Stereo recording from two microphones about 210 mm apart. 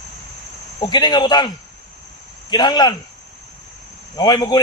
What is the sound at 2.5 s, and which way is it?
Speech, 20° left (ahead or behind).